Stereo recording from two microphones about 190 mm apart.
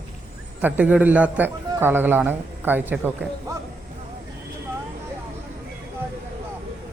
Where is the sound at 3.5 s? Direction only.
15° right (ahead or behind).